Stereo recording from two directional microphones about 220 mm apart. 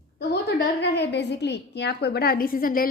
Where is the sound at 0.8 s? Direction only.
50° left (ahead or behind).